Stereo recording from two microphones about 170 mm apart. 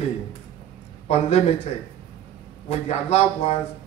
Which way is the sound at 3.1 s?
40° left (ahead or behind).